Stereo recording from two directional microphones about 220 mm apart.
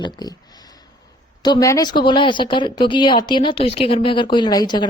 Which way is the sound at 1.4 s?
15° left (ahead or behind).